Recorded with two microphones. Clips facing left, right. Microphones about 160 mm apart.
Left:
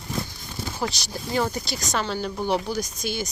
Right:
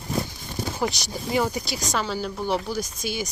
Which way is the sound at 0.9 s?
20° right (ahead or behind).